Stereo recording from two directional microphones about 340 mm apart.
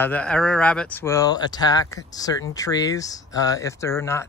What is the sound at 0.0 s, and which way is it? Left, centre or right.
Speech, centre.